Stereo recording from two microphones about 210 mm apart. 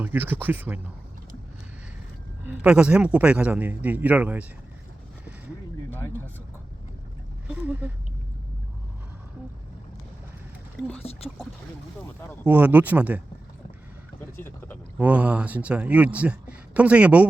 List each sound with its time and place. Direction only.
0.0 s speech: 10° right (ahead or behind)
2.4 s speech: 10° right (ahead or behind)
5.9 s a sound: 10° left (ahead or behind)
7.4 s speech: 5° right (ahead or behind)
12.5 s speech: 10° right (ahead or behind)
14.2 s a sound: 10° left (ahead or behind)
14.9 s speech: 5° right (ahead or behind)